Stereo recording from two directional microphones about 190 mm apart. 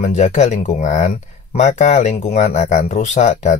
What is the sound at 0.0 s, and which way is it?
Speech, 40° left (ahead or behind).